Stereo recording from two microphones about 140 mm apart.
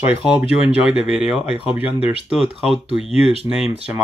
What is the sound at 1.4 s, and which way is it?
Speech, 40° left (ahead or behind).